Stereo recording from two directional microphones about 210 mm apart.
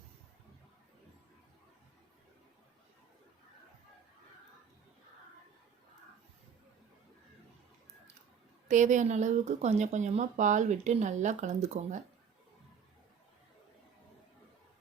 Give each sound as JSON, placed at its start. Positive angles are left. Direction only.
{"t": 8.6, "sound": "speech", "side_deg": -35}